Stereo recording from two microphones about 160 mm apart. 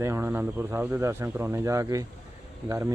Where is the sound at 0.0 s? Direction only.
15° right (ahead or behind).